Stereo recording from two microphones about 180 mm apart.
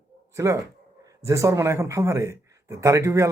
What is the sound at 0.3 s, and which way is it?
Speech, 15° right (ahead or behind).